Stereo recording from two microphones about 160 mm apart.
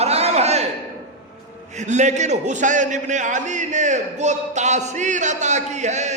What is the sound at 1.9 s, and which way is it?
A man's voice, 50° right (ahead or behind).